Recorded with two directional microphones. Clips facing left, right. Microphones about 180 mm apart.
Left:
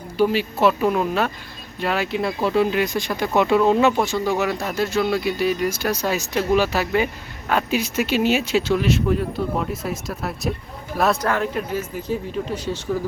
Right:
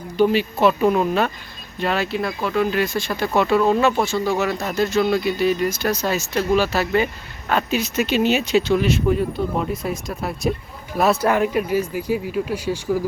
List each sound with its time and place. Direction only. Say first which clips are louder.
0.2 s speech: right 2 dB; 5° left (ahead or behind); by 2.7 s 30° left (ahead or behind)
2.7 s speech: even; 15° left (ahead or behind); by 11.2 s centre (ahead or behind)
11.3 s speech: right 4 dB; 15° right (ahead or behind)